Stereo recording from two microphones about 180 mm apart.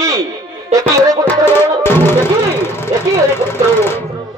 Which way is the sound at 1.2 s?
10° left (ahead or behind).